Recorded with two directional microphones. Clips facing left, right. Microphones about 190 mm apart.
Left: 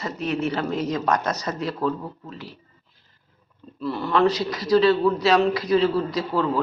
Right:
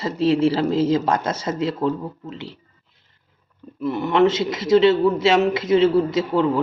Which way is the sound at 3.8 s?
20° right (ahead or behind).